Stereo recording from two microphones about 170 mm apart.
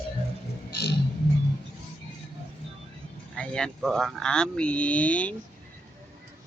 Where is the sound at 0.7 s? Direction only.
75° left (ahead or behind).